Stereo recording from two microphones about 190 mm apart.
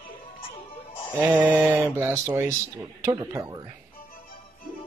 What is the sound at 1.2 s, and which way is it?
Speech, 10° right (ahead or behind).